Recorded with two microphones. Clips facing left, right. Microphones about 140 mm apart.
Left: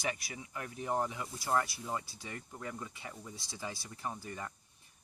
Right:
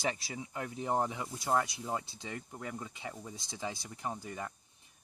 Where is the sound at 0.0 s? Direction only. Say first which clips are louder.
Right 3 dB; 30° right (ahead or behind).